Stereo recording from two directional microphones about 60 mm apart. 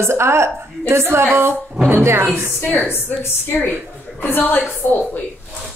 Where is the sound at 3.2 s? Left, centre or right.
Left.